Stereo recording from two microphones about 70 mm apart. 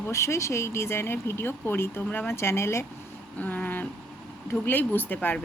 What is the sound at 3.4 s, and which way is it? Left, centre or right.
Speech, left.